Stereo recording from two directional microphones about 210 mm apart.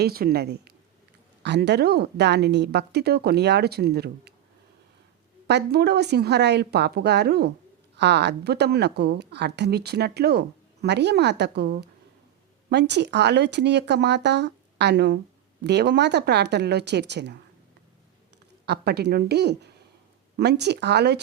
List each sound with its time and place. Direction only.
0.0 s a woman's voice: 45° right (ahead or behind)
5.5 s a woman's voice: 50° right (ahead or behind)
12.7 s a woman's voice: 55° right (ahead or behind)
18.6 s a woman's voice: 50° right (ahead or behind)